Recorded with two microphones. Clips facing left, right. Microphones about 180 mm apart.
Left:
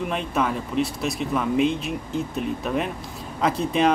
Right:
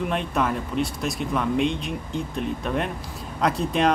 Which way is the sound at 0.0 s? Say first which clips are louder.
Even; centre (ahead or behind).